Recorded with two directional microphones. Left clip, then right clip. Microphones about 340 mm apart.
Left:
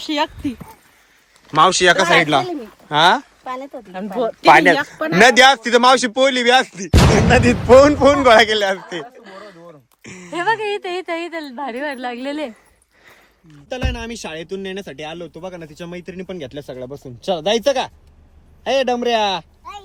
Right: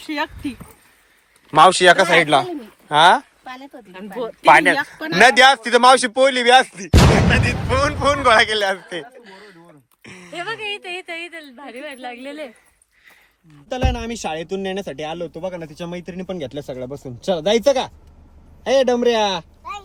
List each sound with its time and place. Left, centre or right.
0.0 s speech: centre
3.9 s a woman's voice: left
4.4 s speech: centre
7.7 s a man's voice: centre
9.2 s a sound: left
10.0 s a sound: centre
10.3 s a woman's voice: left
13.7 s a man's voice: centre